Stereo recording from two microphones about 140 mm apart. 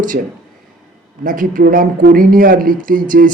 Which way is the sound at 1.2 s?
75° right (ahead or behind).